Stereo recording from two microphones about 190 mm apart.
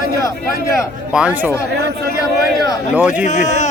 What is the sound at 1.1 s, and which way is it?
Speech, 5° right (ahead or behind).